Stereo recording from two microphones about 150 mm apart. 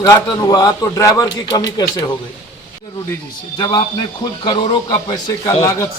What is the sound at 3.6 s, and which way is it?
A man's voice, 30° left (ahead or behind).